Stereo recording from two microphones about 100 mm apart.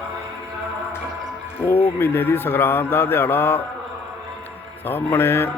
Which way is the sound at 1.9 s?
20° left (ahead or behind).